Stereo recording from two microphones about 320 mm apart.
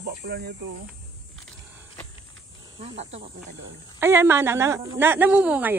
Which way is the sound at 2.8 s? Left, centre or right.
Centre.